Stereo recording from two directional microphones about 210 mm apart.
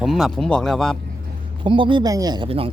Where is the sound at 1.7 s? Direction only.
25° right (ahead or behind).